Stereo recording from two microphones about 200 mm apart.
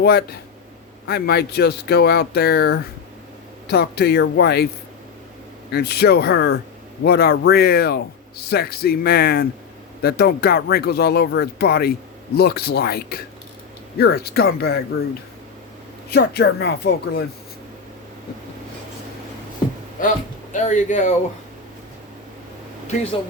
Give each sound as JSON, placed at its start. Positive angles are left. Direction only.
{"t": 0.0, "sound": "speech", "side_deg": 50}
{"t": 5.7, "sound": "speech", "side_deg": 55}
{"t": 16.0, "sound": "speech", "side_deg": 50}
{"t": 20.0, "sound": "speech", "side_deg": 40}